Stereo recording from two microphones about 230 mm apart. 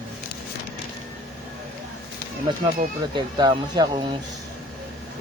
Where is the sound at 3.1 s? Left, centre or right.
Centre.